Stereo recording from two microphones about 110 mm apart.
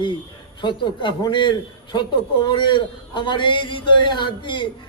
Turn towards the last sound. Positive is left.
turn(degrees=45)  # may be behind; listen again after turning